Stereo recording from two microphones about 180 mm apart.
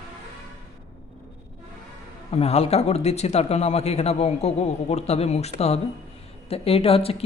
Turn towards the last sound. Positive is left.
turn(degrees=35)  # may be behind; listen again after turning